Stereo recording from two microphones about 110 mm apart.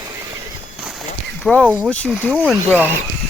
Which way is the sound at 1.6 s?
15° right (ahead or behind).